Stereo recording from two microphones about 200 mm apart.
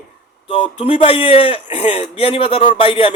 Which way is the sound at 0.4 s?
25° left (ahead or behind).